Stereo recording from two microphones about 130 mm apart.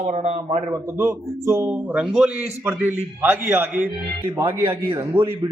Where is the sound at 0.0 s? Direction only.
60° right (ahead or behind).